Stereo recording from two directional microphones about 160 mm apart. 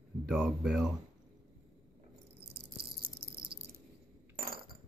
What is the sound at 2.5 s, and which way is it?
Rattle, 70° right (ahead or behind).